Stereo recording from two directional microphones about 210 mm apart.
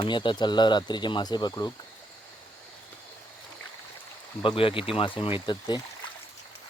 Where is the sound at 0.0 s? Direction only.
25° left (ahead or behind).